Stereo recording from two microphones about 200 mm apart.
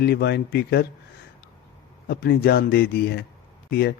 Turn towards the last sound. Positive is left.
turn(degrees=50)  # may be behind; listen again after turning